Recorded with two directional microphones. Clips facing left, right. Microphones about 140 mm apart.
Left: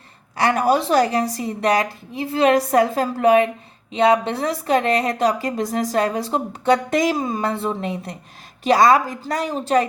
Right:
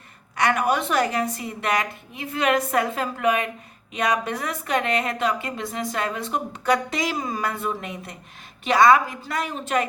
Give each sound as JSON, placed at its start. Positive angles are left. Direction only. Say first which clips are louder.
{"t": 0.3, "sound": "a woman's voice", "louder": "left 4 dB", "side_deg": 30}
{"t": 6.9, "sound": "a woman's voice", "louder": "left 8 dB", "side_deg": 45}
{"t": 7.2, "sound": "a woman's voice", "louder": "left 5 dB", "side_deg": 25}